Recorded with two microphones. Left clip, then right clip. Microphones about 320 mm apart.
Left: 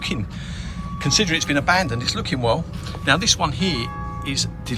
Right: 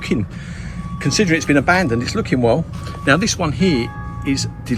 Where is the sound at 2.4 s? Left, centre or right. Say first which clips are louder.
Right 6 dB; left.